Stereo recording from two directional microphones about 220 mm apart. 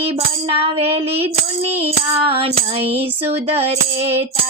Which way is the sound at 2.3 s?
25° right (ahead or behind).